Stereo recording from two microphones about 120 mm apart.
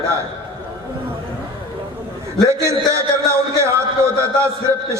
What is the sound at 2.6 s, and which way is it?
A man's voice, 25° right (ahead or behind).